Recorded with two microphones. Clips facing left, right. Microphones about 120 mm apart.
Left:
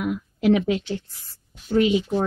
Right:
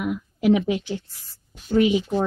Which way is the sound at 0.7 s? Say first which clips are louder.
Left 1 dB; 15° right (ahead or behind).